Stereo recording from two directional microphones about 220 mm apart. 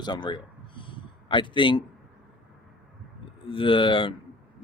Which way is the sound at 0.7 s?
20° left (ahead or behind).